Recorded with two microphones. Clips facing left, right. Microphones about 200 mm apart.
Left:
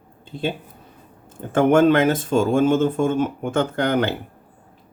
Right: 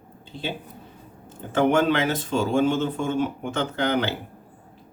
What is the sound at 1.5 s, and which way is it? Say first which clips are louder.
Speech: left 5 dB; 50° left (ahead or behind).